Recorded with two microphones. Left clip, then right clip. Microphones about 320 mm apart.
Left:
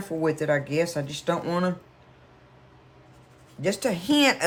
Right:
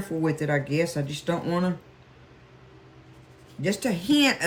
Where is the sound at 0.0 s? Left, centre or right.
Centre.